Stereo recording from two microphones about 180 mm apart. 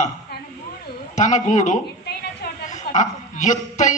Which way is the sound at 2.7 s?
40° left (ahead or behind).